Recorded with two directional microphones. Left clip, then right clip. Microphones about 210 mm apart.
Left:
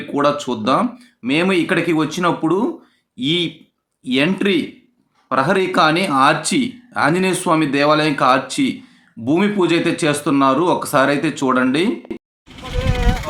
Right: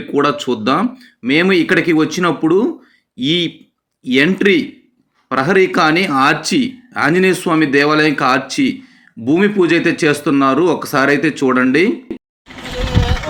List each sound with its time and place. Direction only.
0.1 s speech: 10° right (ahead or behind)